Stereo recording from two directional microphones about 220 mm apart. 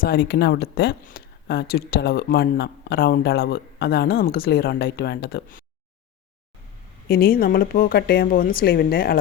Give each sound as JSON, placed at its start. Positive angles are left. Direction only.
{"t": 0.0, "sound": "speech", "side_deg": 45}
{"t": 7.1, "sound": "speech", "side_deg": 40}